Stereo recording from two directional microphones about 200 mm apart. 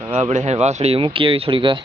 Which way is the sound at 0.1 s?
35° right (ahead or behind).